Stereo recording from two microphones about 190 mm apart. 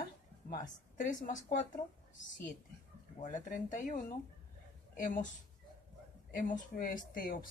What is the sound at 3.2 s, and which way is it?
Speech, 40° left (ahead or behind).